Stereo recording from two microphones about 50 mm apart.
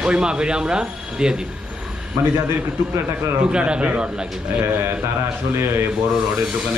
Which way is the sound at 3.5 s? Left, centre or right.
Centre.